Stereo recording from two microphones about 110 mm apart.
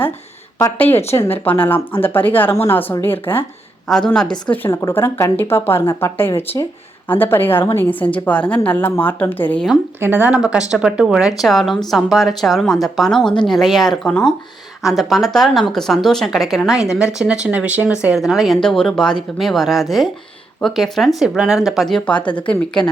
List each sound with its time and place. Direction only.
0.8 s a woman's voice: 20° left (ahead or behind)
3.8 s a woman's voice: 5° left (ahead or behind)
10.0 s speech: 15° right (ahead or behind); by 22.8 s 10° left (ahead or behind)